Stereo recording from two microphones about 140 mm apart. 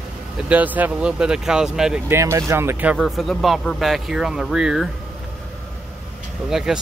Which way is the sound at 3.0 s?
Centre (ahead or behind).